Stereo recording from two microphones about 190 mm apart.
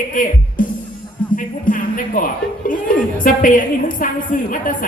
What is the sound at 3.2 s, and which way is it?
A woman's voice, 45° left (ahead or behind).